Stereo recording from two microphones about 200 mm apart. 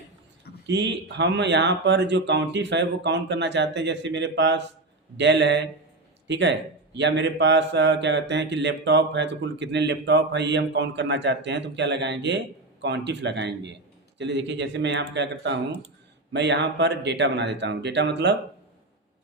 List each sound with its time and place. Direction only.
0.7 s speech: 60° right (ahead or behind)